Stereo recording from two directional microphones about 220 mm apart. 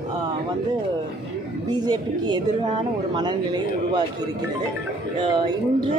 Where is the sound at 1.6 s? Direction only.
20° right (ahead or behind).